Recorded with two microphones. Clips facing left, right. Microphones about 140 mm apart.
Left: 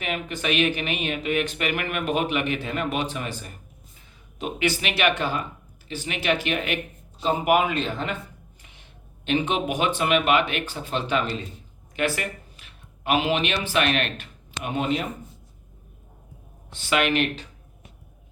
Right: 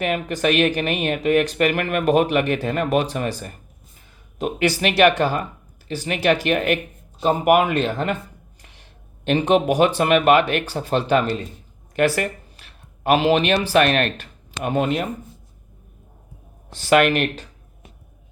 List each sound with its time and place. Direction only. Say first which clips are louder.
0.0 s speech: right 7 dB; 45° right (ahead or behind)
16.6 s speech: right 7 dB; 40° right (ahead or behind)